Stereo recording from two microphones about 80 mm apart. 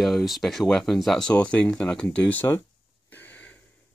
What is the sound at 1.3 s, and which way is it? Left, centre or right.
Speech, centre.